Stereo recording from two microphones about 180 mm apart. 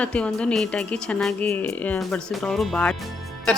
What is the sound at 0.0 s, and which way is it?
Speech, 5° left (ahead or behind).